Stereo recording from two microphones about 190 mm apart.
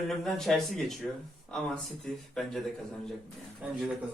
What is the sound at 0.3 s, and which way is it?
Speech, centre (ahead or behind).